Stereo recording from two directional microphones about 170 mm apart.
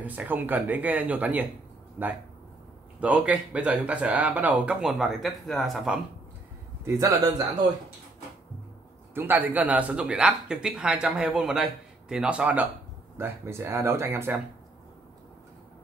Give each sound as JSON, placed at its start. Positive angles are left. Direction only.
{"t": 0.0, "sound": "speech", "side_deg": -10}
{"t": 6.8, "sound": "a man's voice", "side_deg": -15}
{"t": 9.1, "sound": "speech", "side_deg": -10}